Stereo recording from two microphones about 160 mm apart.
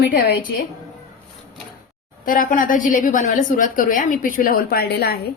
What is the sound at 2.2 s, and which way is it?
A woman's voice, 60° left (ahead or behind).